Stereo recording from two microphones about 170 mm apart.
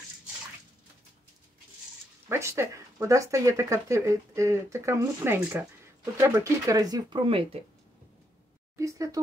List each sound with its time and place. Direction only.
2.2 s speech: 15° right (ahead or behind)
8.7 s speech: 20° right (ahead or behind)